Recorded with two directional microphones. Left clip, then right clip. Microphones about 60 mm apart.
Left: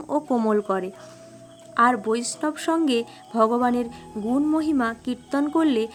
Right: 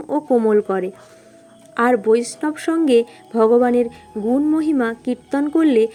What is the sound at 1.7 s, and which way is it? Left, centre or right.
Speech, right.